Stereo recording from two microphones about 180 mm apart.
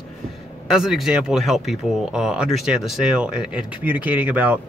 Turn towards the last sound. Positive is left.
turn(degrees=-10)  # may be behind; listen again after turning